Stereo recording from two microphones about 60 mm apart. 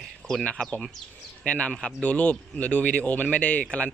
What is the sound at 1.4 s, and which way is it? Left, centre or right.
Speech, left.